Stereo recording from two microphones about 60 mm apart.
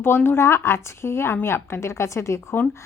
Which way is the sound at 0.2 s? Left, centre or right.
Left.